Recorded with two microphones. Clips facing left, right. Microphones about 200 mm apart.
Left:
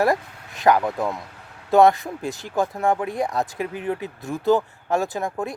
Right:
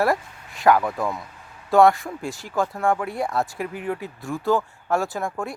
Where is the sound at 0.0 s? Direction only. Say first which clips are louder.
Left 1 dB; 20° left (ahead or behind).